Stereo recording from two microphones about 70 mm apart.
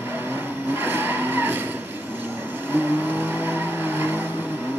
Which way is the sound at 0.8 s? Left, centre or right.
Right.